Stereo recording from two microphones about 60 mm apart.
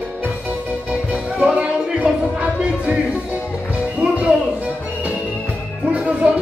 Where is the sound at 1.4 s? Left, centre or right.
Right.